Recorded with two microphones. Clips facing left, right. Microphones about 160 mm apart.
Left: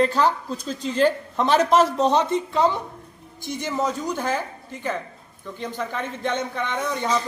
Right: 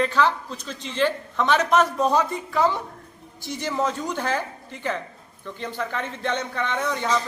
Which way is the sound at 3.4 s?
55° left (ahead or behind).